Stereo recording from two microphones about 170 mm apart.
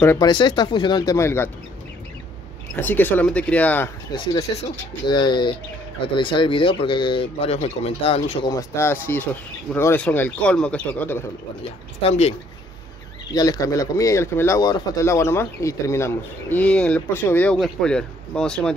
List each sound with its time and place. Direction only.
0.0 s speech: 15° left (ahead or behind)
0.3 s speech: 25° left (ahead or behind)
2.7 s speech: 10° left (ahead or behind)
4.1 s speech: 20° left (ahead or behind)
8.5 s speech: 15° left (ahead or behind)
11.6 s speech: 40° left (ahead or behind)
13.3 s speech: 20° left (ahead or behind); by 18.8 s 5° left (ahead or behind)